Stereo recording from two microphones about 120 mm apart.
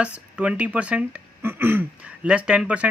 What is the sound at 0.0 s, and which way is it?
Speech, 10° right (ahead or behind).